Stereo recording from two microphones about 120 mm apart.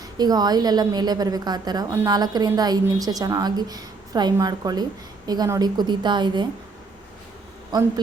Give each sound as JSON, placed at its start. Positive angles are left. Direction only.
{"t": 0.2, "sound": "a woman's voice", "side_deg": -35}